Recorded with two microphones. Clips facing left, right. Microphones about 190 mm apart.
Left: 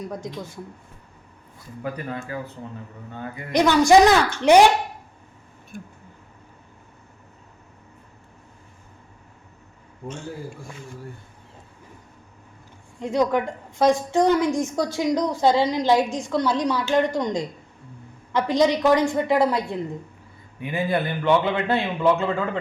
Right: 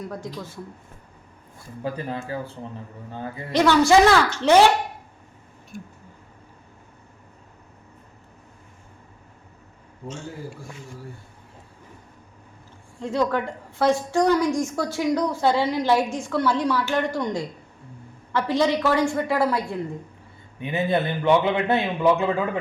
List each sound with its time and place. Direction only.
0.0 s a woman's voice: 20° left (ahead or behind)
1.8 s a man's voice: 25° right (ahead or behind)
3.5 s a woman's voice: 15° left (ahead or behind)
5.7 s a sound: 50° left (ahead or behind)
13.0 s a woman's voice: 15° left (ahead or behind)
20.6 s a man's voice: 20° right (ahead or behind)